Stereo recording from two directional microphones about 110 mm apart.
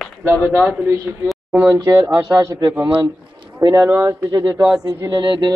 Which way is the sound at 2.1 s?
30° right (ahead or behind).